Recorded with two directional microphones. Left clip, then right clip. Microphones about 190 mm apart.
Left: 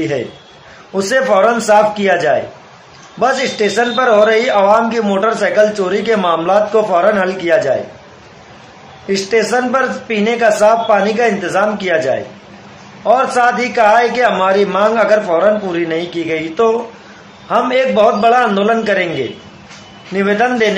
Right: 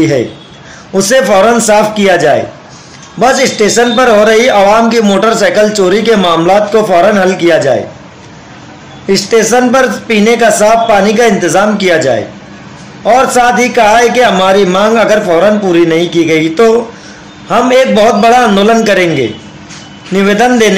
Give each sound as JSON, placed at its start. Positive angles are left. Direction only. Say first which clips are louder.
{"t": 0.9, "sound": "a man's voice", "louder": "right 5 dB", "side_deg": -30}
{"t": 9.1, "sound": "a man's voice", "louder": "right 6 dB", "side_deg": -25}
{"t": 13.0, "sound": "a man's voice", "louder": "right 5 dB", "side_deg": -25}
{"t": 20.2, "sound": "a man's voice", "louder": "right 6 dB", "side_deg": -30}